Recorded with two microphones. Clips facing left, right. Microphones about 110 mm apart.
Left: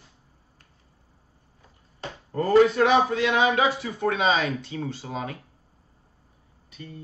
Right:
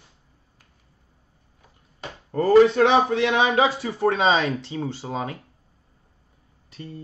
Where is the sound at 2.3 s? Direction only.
30° right (ahead or behind).